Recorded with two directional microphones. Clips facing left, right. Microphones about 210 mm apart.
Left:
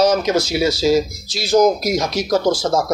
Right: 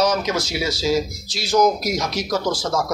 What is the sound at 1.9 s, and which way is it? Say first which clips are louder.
Speech: left 5 dB; 40° left (ahead or behind).